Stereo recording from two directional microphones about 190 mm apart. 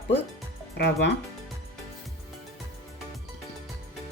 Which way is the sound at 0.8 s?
65° left (ahead or behind).